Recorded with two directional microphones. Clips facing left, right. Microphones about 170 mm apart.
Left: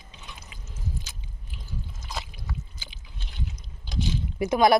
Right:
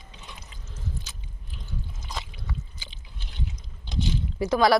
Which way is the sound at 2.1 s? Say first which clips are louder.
Left 1 dB; 10° left (ahead or behind).